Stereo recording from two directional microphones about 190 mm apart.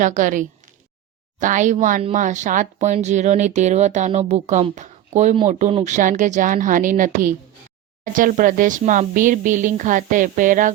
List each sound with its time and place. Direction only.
0.0 s speech: 40° right (ahead or behind)